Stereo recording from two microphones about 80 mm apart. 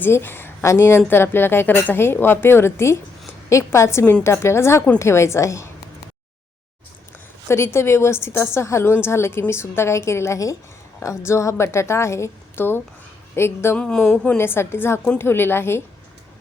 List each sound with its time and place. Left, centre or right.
0.0 s a woman's voice: left
7.4 s a woman's voice: left
13.7 s speech: centre
14.3 s a woman's voice: left